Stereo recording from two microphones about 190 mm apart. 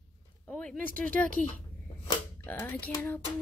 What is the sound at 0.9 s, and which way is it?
Speech, 10° left (ahead or behind).